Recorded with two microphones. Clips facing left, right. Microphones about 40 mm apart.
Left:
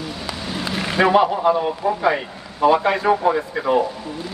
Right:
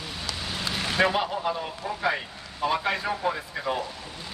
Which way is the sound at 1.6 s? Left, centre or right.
Left.